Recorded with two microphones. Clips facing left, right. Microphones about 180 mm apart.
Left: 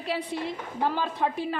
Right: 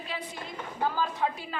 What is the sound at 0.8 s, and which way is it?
Speech, 30° left (ahead or behind).